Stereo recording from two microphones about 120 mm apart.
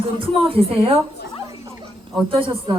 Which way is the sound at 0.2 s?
50° right (ahead or behind).